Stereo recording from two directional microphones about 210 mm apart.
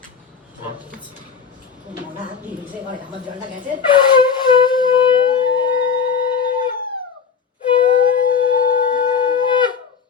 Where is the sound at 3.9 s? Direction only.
20° left (ahead or behind).